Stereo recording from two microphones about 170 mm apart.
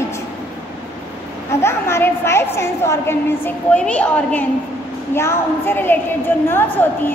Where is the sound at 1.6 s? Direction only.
15° left (ahead or behind).